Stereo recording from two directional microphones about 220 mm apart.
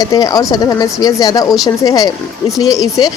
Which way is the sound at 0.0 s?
15° left (ahead or behind).